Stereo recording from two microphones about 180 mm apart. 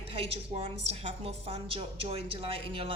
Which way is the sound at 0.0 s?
30° right (ahead or behind).